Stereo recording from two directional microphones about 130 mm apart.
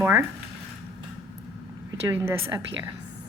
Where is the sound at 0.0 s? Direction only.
15° right (ahead or behind).